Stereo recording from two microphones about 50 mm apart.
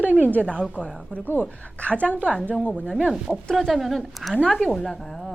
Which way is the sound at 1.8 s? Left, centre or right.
Left.